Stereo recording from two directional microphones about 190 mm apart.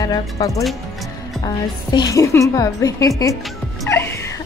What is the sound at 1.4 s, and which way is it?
A woman's voice, 20° left (ahead or behind).